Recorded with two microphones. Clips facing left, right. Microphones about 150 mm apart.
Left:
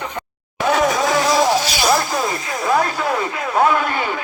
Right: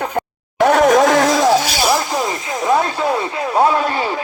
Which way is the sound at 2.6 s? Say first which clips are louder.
Right 2 dB; 25° right (ahead or behind).